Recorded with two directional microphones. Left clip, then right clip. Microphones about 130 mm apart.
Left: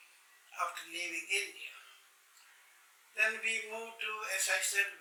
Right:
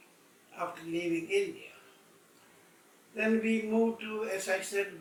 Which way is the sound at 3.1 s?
Centre (ahead or behind).